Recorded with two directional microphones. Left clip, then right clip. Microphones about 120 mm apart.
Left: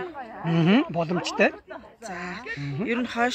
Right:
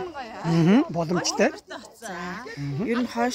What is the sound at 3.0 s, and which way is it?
Speech, 20° right (ahead or behind).